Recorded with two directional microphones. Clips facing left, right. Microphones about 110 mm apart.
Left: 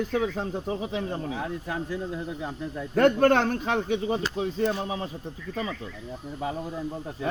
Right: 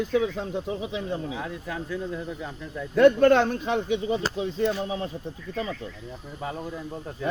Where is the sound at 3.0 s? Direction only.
50° left (ahead or behind).